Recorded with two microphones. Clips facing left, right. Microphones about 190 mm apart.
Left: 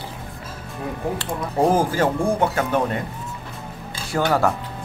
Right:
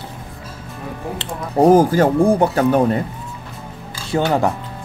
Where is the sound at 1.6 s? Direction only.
40° right (ahead or behind).